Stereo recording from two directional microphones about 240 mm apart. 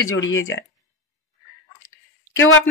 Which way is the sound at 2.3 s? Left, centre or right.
Left.